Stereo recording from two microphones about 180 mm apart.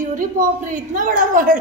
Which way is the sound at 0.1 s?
45° right (ahead or behind).